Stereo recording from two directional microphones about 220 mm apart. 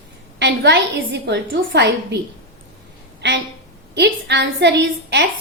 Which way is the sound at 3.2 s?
50° right (ahead or behind).